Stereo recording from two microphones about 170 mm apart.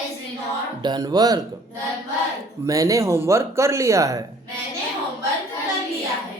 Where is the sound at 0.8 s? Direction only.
25° right (ahead or behind).